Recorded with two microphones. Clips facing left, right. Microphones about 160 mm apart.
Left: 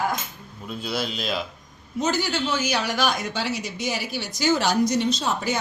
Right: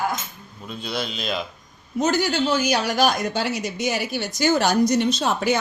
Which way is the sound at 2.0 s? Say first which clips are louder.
Right 4 dB; 45° right (ahead or behind).